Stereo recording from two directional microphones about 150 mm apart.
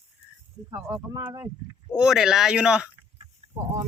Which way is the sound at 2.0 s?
5° right (ahead or behind).